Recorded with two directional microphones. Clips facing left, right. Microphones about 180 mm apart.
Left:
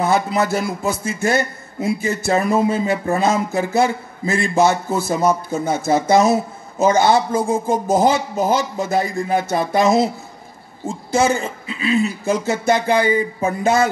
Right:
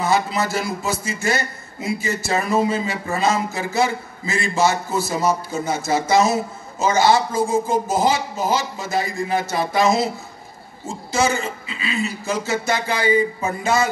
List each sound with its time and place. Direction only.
0.0 s a man's voice: 55° left (ahead or behind)